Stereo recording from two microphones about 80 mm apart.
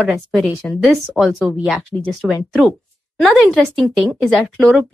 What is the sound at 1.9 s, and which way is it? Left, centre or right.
Speech, centre.